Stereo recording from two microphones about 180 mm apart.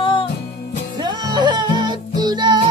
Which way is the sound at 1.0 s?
25° right (ahead or behind).